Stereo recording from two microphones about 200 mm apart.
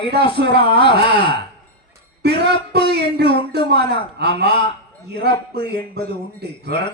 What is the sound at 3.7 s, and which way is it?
Speech, 55° right (ahead or behind).